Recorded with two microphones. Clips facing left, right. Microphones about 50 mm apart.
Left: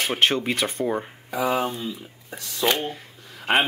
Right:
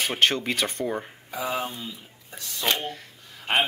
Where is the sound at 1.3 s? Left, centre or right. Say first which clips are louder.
Left 6 dB; left.